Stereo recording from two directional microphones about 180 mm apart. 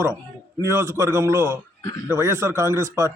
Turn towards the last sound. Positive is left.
turn(degrees=-15)  # may be behind; listen again after turning